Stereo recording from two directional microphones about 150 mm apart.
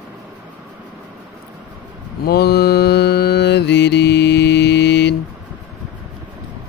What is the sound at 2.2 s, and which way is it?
Mantra, 90° left.